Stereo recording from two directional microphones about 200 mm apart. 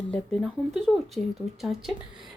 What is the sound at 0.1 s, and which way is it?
A woman's voice, 5° left (ahead or behind).